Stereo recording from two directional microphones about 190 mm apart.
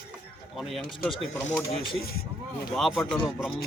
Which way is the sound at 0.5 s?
Centre (ahead or behind).